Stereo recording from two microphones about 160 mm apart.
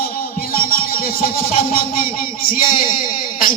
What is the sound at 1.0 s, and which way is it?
Music, 65° left (ahead or behind).